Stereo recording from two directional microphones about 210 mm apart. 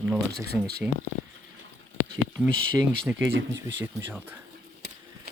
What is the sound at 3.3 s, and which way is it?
Speech, 60° right (ahead or behind).